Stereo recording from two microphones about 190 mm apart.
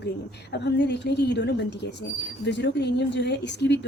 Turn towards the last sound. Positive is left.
turn(degrees=65)  # may be behind; listen again after turning